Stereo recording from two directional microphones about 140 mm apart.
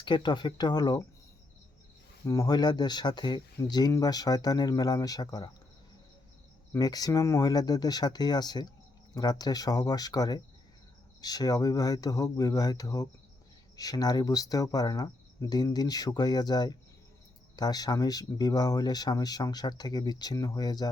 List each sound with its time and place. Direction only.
0.0 s speech: 35° left (ahead or behind)
2.2 s speech: 25° left (ahead or behind)
6.7 s speech: 25° left (ahead or behind)